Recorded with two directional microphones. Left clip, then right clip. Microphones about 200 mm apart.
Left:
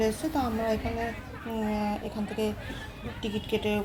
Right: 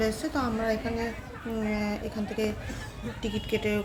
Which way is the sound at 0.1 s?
5° right (ahead or behind).